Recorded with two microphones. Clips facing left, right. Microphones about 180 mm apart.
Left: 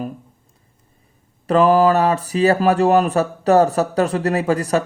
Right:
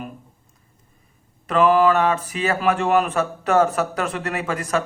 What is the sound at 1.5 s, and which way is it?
Speech, 35° left (ahead or behind).